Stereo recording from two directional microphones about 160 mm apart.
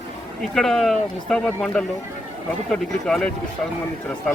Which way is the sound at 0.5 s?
Centre (ahead or behind).